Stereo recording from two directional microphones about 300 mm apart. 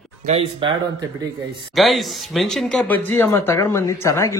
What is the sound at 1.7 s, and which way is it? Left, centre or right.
Speech, centre.